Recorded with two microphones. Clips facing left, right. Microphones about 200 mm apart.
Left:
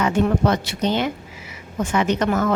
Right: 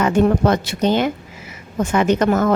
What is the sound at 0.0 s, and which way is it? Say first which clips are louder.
Speech: right 4 dB; 45° right (ahead or behind).